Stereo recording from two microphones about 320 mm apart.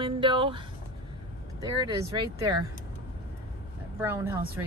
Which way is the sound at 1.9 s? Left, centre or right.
Centre.